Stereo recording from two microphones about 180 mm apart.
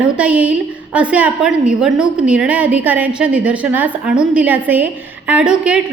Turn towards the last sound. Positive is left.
turn(degrees=-5)  # may be behind; listen again after turning